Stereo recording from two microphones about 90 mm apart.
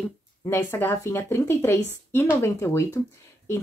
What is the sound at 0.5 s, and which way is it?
Speech, 25° left (ahead or behind).